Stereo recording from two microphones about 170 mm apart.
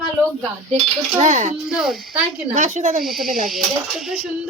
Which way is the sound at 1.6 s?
Centre (ahead or behind).